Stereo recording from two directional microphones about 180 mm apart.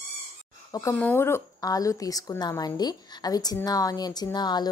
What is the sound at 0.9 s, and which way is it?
A woman's voice, 10° left (ahead or behind).